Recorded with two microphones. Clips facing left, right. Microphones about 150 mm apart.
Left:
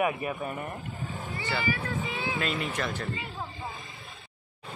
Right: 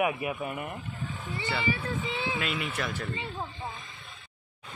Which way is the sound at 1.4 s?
25° right (ahead or behind).